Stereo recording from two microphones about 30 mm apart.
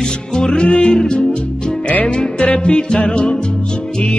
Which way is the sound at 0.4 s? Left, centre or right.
Left.